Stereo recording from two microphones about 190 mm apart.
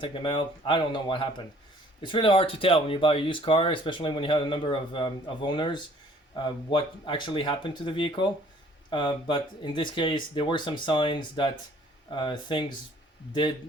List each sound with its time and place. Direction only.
0.0 s speech: 25° left (ahead or behind)